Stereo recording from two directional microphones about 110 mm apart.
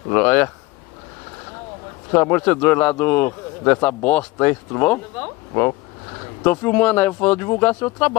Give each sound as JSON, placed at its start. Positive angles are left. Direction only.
{"t": 0.1, "sound": "speech", "side_deg": 15}
{"t": 2.1, "sound": "a man's voice", "side_deg": 20}